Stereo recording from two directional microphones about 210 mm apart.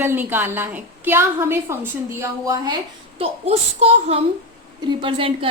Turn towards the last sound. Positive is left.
turn(degrees=-25)  # may be behind; listen again after turning